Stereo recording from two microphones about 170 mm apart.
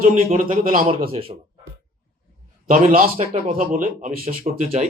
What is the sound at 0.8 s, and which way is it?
Speech, 35° right (ahead or behind).